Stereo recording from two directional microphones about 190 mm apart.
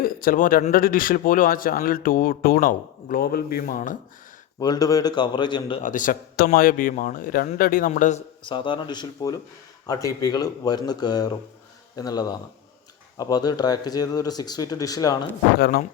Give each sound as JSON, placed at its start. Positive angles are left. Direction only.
{"t": 0.0, "sound": "speech", "side_deg": 50}
{"t": 4.6, "sound": "speech", "side_deg": 20}
{"t": 5.8, "sound": "speech", "side_deg": 45}
{"t": 8.4, "sound": "speech", "side_deg": 25}
{"t": 15.5, "sound": "speech", "side_deg": 55}